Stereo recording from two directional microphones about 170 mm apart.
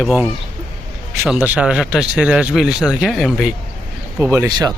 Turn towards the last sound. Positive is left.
turn(degrees=-20)  # may be behind; listen again after turning